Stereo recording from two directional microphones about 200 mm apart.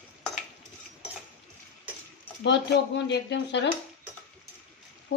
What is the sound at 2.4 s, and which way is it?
Speech, 60° left (ahead or behind).